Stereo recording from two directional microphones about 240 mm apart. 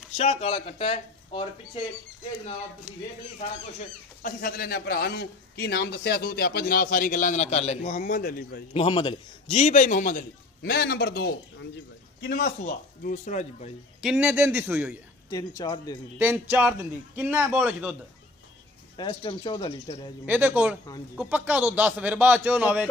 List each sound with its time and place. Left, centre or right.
0.2 s speech: left
4.2 s a man's voice: left
8.7 s a man's voice: left
14.0 s a man's voice: centre
15.2 s speech: centre
16.2 s a man's voice: centre
18.9 s speech: centre
20.2 s a man's voice: centre